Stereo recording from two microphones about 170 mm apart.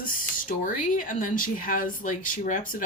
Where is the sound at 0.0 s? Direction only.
55° left (ahead or behind).